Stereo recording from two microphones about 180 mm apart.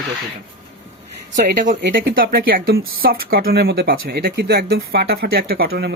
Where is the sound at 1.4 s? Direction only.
50° right (ahead or behind).